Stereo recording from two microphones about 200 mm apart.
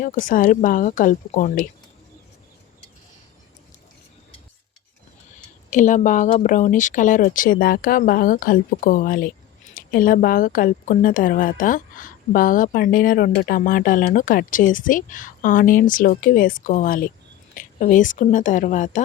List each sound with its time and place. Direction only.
0.0 s a woman's voice: 40° left (ahead or behind)
5.7 s a woman's voice: 40° left (ahead or behind)